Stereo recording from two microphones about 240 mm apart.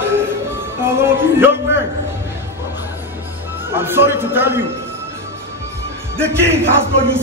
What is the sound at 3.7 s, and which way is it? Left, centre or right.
Speech, centre.